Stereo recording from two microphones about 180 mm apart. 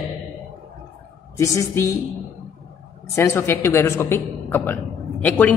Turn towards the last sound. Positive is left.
turn(degrees=10)  # may be behind; listen again after turning